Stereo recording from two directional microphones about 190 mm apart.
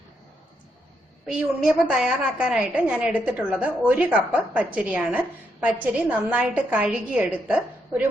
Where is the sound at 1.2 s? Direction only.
5° right (ahead or behind).